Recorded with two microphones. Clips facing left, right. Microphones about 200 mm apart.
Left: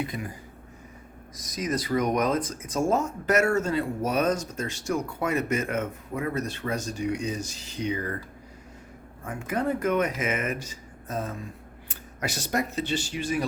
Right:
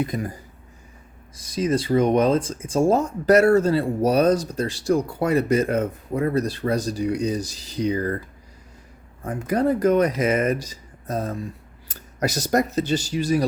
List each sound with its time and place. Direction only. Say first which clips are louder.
0.0 s speech: right 6 dB; 40° right (ahead or behind)
1.4 s speech: right 7 dB; 30° right (ahead or behind)
9.2 s speech: right 7 dB; 35° right (ahead or behind)